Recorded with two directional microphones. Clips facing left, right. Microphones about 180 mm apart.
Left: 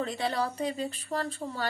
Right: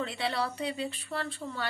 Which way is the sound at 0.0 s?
40° left (ahead or behind).